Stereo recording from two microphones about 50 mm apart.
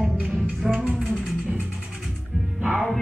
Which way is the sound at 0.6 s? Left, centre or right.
Centre.